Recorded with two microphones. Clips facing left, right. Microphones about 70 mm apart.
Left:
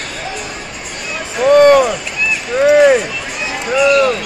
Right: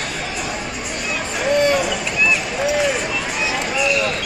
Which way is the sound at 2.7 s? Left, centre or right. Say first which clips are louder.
Left 12 dB; left.